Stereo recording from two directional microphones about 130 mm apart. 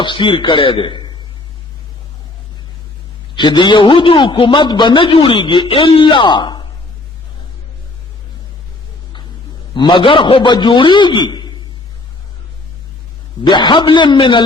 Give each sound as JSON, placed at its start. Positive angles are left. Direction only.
{"t": 0.0, "sound": "a man's voice", "side_deg": 40}
{"t": 3.3, "sound": "a man's voice", "side_deg": 35}
{"t": 9.7, "sound": "a man's voice", "side_deg": 35}
{"t": 13.5, "sound": "a man's voice", "side_deg": 35}